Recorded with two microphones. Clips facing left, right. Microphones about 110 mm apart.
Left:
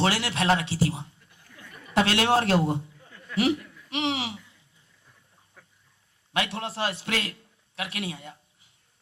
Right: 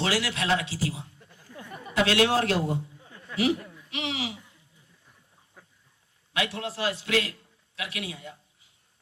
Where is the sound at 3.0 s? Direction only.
15° right (ahead or behind).